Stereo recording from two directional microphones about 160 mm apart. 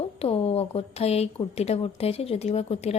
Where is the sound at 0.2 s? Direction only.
40° left (ahead or behind).